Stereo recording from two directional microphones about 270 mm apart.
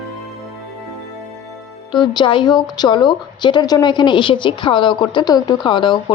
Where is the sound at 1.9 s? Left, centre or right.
Centre.